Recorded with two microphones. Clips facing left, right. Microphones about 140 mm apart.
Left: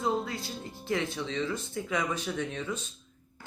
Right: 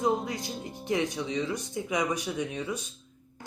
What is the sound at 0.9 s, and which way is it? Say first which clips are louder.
Speech: right 2 dB; 15° right (ahead or behind).